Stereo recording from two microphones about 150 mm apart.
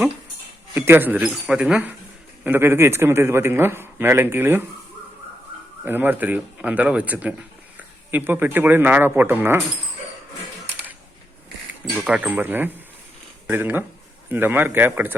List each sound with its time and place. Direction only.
0.7 s a man's voice: 15° right (ahead or behind)
5.8 s a man's voice: 10° right (ahead or behind)
11.9 s a man's voice: 10° right (ahead or behind)